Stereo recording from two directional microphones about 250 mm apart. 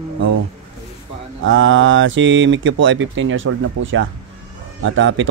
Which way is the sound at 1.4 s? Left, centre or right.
Right.